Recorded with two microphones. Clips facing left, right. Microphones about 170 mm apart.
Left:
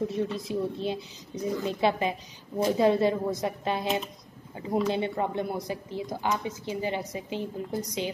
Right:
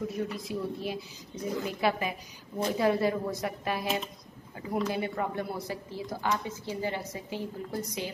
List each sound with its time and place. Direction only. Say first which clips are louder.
0.1 s speech: left 4 dB; 25° left (ahead or behind)